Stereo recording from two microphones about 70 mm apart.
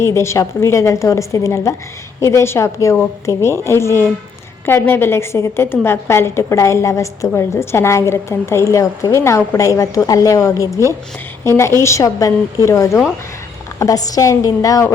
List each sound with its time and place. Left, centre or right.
0.0 s a woman's voice: left
8.7 s a woman's voice: left
11.4 s a woman's voice: left